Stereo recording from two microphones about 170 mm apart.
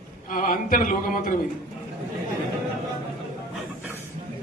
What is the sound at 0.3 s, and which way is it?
Speech, 50° left (ahead or behind).